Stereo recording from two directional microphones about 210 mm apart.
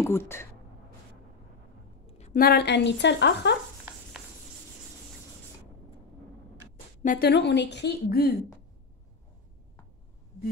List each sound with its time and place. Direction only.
0.0 s speech: 10° left (ahead or behind)
2.0 s a sound: 30° left (ahead or behind)
2.3 s a woman's voice: 45° left (ahead or behind)
7.0 s speech: 45° left (ahead or behind)